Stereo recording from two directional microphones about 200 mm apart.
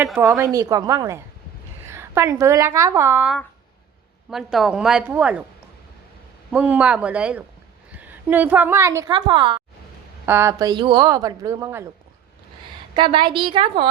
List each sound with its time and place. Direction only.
0.0 s speech: centre (ahead or behind)
0.3 s a woman's voice: 15° right (ahead or behind)
6.5 s a woman's voice: 5° right (ahead or behind); by 9.6 s 25° right (ahead or behind)
10.2 s a woman's voice: 10° right (ahead or behind)
13.0 s a woman's voice: 25° right (ahead or behind)